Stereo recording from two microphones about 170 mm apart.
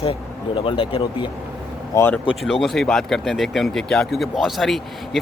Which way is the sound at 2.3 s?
Centre (ahead or behind).